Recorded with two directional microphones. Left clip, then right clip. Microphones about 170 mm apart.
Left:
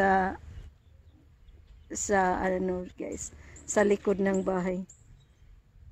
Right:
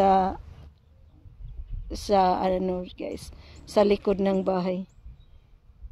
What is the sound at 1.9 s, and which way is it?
Speech, 15° right (ahead or behind).